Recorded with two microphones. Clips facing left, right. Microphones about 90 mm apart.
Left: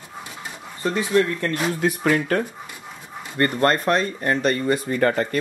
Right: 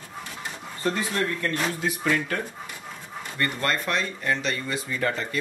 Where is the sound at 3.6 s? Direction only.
40° left (ahead or behind).